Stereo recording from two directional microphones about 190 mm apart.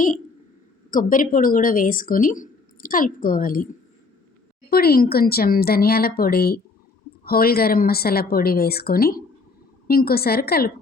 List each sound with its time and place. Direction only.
0.9 s speech: 45° left (ahead or behind)
4.7 s speech: 55° left (ahead or behind)